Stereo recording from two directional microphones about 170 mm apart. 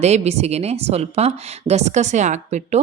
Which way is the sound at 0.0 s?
40° right (ahead or behind).